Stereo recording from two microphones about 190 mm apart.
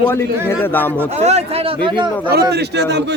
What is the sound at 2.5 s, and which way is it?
Speech, 60° right (ahead or behind).